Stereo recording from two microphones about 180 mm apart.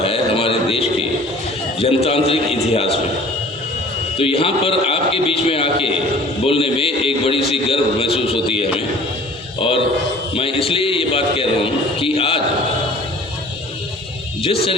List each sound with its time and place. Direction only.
0.0 s a sound: 30° left (ahead or behind)
1.8 s a man's voice: 35° left (ahead or behind)
4.2 s a man's voice: 30° left (ahead or behind)
14.4 s a man's voice: 30° left (ahead or behind)